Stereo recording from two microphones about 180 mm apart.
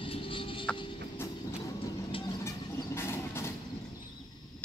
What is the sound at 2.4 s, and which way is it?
Vehicle, 15° left (ahead or behind).